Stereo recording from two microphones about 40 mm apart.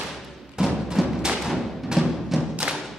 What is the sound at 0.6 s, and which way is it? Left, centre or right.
Music, centre.